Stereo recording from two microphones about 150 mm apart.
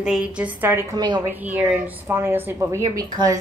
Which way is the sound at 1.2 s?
10° right (ahead or behind).